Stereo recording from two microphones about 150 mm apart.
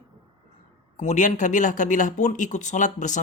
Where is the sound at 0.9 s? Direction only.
50° left (ahead or behind).